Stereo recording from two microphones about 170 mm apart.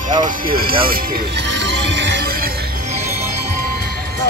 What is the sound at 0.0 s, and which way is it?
Music, 50° right (ahead or behind).